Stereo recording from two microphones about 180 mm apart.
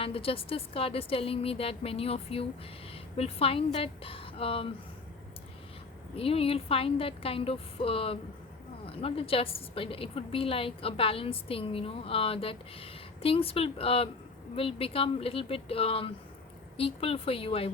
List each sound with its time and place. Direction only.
0.0 s a woman's voice: 30° left (ahead or behind)
6.1 s a woman's voice: 30° left (ahead or behind)